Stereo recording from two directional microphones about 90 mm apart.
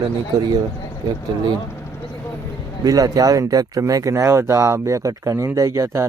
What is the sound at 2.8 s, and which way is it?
Speech, 40° right (ahead or behind).